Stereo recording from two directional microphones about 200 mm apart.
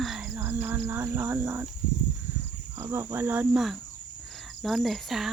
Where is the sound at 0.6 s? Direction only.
10° right (ahead or behind).